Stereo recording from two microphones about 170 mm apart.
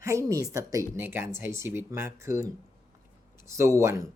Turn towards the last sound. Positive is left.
turn(degrees=-15)  # may be behind; listen again after turning